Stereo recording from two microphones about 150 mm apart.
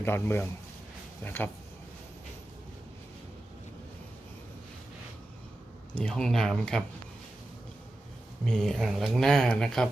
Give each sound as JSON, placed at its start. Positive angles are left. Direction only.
{"t": 0.0, "sound": "a man's voice", "side_deg": 15}
{"t": 5.9, "sound": "speech", "side_deg": 5}
{"t": 8.4, "sound": "speech", "side_deg": 5}